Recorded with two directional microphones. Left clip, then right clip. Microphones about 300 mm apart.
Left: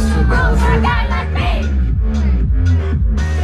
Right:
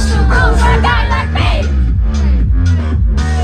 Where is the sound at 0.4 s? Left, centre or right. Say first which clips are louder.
Right 5 dB; right.